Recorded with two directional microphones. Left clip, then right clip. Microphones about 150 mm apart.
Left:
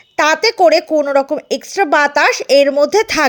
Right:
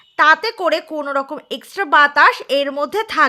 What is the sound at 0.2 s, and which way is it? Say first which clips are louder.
A woman's voice: left 3 dB; 25° left (ahead or behind).